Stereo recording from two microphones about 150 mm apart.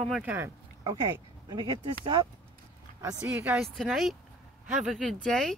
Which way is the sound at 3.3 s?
15° right (ahead or behind).